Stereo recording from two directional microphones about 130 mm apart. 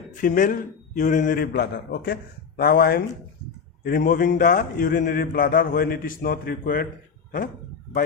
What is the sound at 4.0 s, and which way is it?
Speech, 90° left.